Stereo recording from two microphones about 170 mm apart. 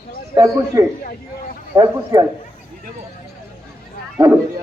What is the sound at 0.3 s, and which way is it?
A man's voice, 20° right (ahead or behind).